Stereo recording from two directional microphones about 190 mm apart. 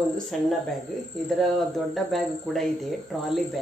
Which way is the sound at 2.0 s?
Centre (ahead or behind).